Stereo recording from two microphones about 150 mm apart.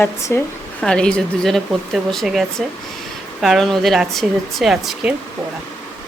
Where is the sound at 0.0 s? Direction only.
15° left (ahead or behind); by 5.1 s centre (ahead or behind).